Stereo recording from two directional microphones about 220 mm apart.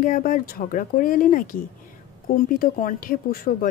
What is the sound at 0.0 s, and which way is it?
Speech, 40° left (ahead or behind).